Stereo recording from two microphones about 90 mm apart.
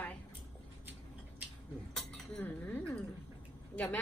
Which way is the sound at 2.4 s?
20° left (ahead or behind).